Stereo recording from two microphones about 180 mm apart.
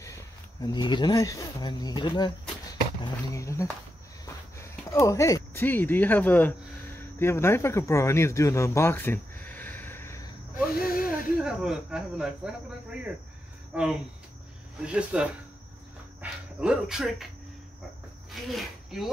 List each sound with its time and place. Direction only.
0.0 s speech: 20° left (ahead or behind)
3.3 s speech: 15° left (ahead or behind)
10.7 s gasp: 55° left (ahead or behind)
11.1 s speech: 5° right (ahead or behind)
18.5 s speech: centre (ahead or behind)